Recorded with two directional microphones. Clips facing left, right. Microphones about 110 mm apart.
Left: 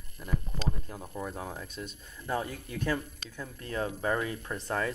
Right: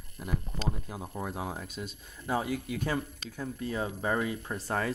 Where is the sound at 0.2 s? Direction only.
15° right (ahead or behind).